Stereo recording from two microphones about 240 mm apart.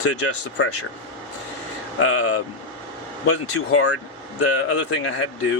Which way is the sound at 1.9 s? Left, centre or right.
Left.